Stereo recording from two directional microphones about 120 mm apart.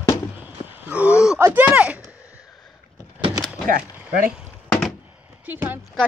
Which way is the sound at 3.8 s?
10° right (ahead or behind).